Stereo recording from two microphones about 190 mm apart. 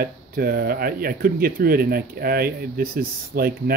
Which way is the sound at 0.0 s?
50° right (ahead or behind).